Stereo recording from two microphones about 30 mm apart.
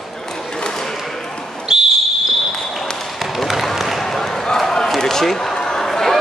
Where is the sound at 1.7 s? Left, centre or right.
Right.